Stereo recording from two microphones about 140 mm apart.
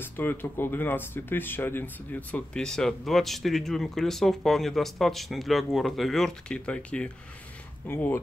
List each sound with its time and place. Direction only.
0.0 s speech: 15° left (ahead or behind)